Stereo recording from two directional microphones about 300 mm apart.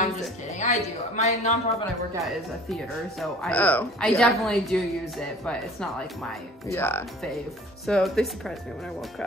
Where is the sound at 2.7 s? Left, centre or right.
Centre.